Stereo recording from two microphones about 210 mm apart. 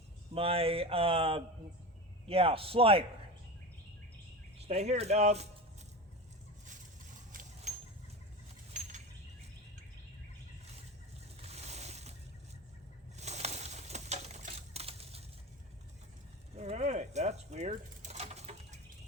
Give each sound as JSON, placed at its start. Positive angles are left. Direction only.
{"t": 0.3, "sound": "speech", "side_deg": -25}
{"t": 4.7, "sound": "speech", "side_deg": -30}
{"t": 7.3, "sound": "a sound", "side_deg": -40}
{"t": 11.4, "sound": "boat", "side_deg": -30}
{"t": 13.1, "sound": "pigeon", "side_deg": -30}
{"t": 16.6, "sound": "sewing machine", "side_deg": -35}